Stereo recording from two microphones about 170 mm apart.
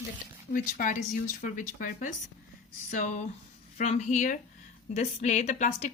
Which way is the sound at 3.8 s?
40° left (ahead or behind).